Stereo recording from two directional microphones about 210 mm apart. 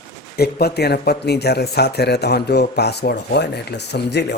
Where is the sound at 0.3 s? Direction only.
50° left (ahead or behind).